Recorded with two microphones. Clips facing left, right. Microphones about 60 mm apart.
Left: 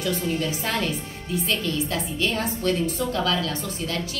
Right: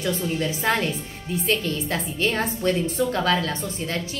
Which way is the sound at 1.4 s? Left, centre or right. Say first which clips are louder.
Right 2 dB; right.